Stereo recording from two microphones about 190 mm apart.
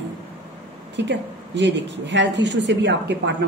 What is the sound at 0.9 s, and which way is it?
A woman's voice, 65° right (ahead or behind).